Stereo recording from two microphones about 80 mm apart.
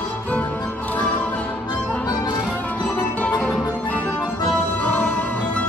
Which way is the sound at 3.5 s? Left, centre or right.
Centre.